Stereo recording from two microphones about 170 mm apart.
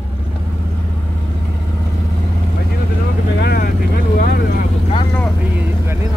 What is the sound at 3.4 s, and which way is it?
Speech, 65° left (ahead or behind).